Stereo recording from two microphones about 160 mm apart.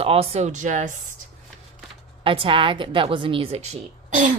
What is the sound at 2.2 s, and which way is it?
A woman's voice, 35° right (ahead or behind).